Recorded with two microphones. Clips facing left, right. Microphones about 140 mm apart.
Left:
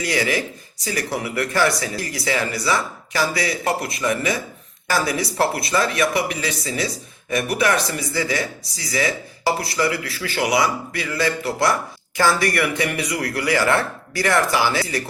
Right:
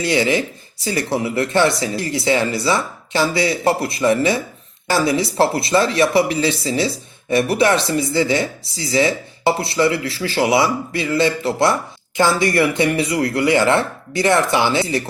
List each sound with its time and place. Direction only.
0.0 s speech: 25° right (ahead or behind)